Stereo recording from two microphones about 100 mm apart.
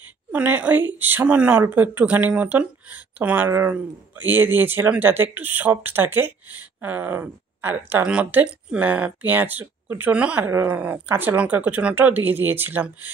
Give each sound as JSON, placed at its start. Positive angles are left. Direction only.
{"t": 0.3, "sound": "speech", "side_deg": -15}